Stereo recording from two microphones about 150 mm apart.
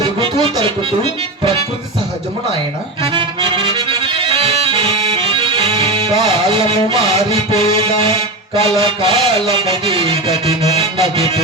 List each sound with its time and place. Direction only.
0.0 s music: 35° right (ahead or behind)
3.1 s accordion: 35° right (ahead or behind)